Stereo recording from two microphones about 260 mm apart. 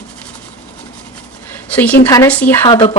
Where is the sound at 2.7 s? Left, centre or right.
Centre.